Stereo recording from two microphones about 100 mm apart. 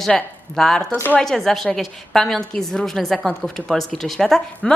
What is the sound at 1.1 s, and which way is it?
A woman's voice, 5° left (ahead or behind).